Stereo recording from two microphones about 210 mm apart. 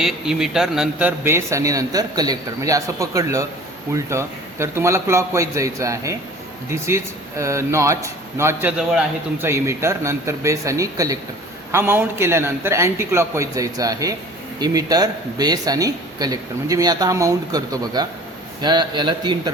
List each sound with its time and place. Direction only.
0.0 s speech: centre (ahead or behind); by 19.4 s 20° right (ahead or behind)